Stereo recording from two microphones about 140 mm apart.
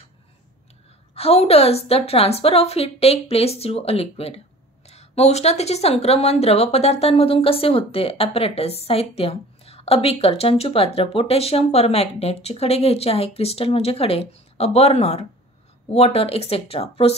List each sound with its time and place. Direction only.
1.1 s speech: 45° left (ahead or behind)